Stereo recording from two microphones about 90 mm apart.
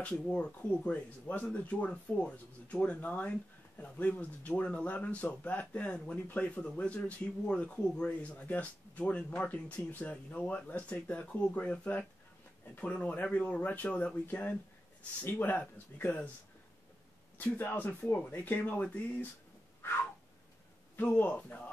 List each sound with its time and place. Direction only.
0.0 s speech: 10° left (ahead or behind)
17.4 s speech: 25° left (ahead or behind)
19.8 s a sound: 25° left (ahead or behind)
20.9 s speech: 20° left (ahead or behind)